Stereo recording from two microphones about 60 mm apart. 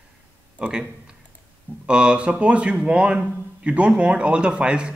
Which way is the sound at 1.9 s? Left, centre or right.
Centre.